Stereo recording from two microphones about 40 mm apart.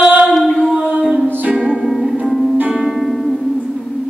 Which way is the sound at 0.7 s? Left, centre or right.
Right.